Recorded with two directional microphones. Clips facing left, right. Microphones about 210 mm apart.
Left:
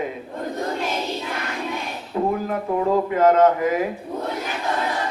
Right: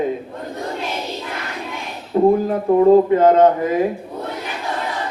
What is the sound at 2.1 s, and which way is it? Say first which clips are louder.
Speech: right 8 dB; 35° right (ahead or behind).